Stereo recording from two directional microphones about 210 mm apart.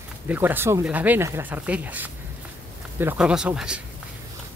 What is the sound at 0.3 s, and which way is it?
Speech, 10° right (ahead or behind).